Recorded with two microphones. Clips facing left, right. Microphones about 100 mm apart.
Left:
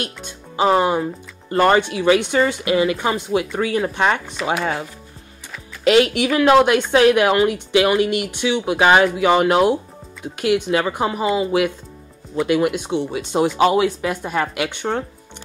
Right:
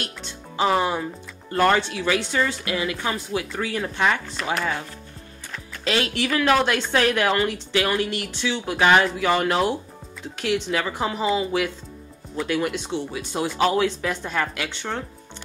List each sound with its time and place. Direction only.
0.0 s speech: 15° left (ahead or behind)
6.0 s speech: 15° left (ahead or behind)